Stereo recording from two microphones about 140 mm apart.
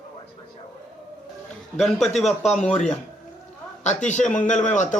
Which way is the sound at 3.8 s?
55° left (ahead or behind).